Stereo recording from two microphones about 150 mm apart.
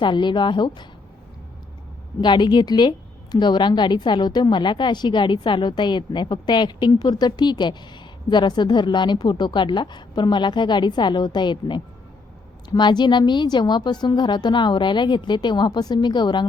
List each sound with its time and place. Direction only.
0.0 s a woman's voice: 30° left (ahead or behind)
2.2 s a woman's voice: 30° left (ahead or behind)